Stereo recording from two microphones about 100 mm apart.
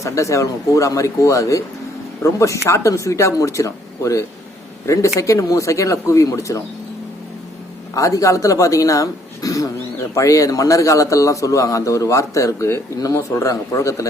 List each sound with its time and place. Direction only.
0.0 s a man's voice: 30° left (ahead or behind)
7.9 s a man's voice: 35° left (ahead or behind)